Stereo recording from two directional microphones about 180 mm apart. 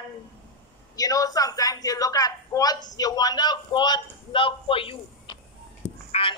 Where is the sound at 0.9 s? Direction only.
20° left (ahead or behind).